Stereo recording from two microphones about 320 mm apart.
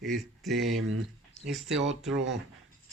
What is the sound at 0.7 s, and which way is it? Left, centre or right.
Speech, right.